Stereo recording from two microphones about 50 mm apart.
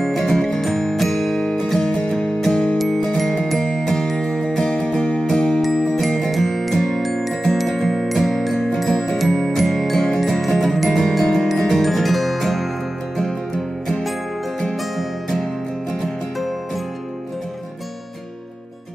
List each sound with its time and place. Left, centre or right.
0.0 s music: centre
4.3 s music: left
4.6 s music: centre
5.2 s music: centre